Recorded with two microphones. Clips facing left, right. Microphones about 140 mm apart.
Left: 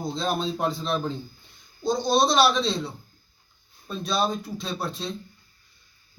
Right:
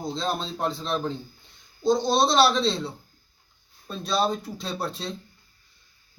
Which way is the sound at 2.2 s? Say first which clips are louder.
Right 1 dB; 30° right (ahead or behind).